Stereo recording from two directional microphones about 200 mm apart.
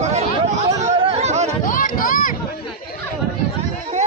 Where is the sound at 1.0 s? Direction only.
30° right (ahead or behind).